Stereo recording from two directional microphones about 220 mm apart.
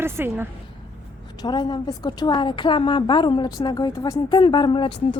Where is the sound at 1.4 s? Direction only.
20° left (ahead or behind).